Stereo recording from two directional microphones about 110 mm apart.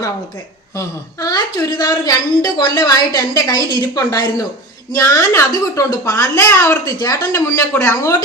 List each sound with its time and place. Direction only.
0.8 s a woman's voice: 30° left (ahead or behind)